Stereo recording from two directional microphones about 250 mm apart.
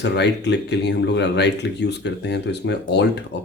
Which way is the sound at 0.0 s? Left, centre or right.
Left.